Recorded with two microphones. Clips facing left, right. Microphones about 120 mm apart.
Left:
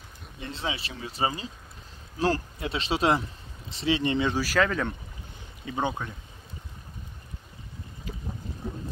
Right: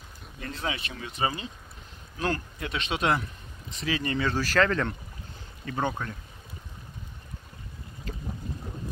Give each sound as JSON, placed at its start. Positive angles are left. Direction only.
{"t": 0.4, "sound": "speech", "side_deg": 25}